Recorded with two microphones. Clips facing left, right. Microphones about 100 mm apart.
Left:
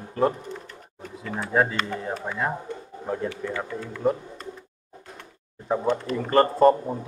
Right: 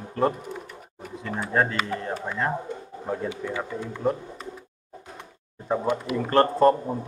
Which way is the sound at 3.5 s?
15° right (ahead or behind).